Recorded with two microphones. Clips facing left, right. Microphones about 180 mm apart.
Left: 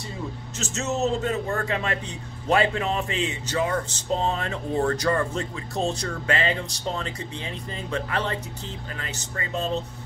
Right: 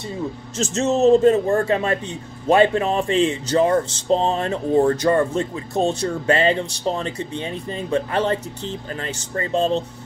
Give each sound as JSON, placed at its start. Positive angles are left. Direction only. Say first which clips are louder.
{"t": 0.7, "sound": "speech", "louder": "right 10 dB", "side_deg": -30}
{"t": 4.2, "sound": "speech", "louder": "right 6 dB", "side_deg": -25}
{"t": 7.9, "sound": "speech", "louder": "right 7 dB", "side_deg": -30}